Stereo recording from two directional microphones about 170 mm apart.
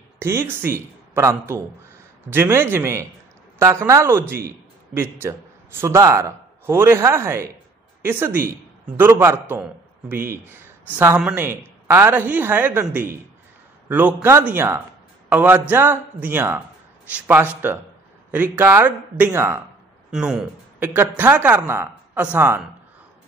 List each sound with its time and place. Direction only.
0.2 s a man's voice: 15° right (ahead or behind)
20.1 s a man's voice: 5° right (ahead or behind)